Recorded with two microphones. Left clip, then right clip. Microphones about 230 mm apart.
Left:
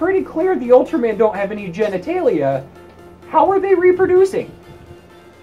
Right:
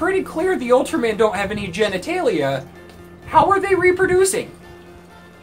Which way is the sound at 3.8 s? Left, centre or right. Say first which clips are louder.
Left 3 dB; right.